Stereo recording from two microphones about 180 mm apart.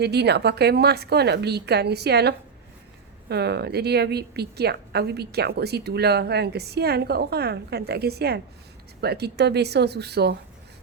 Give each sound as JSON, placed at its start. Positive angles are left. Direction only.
{"t": 0.0, "sound": "a woman's voice", "side_deg": -65}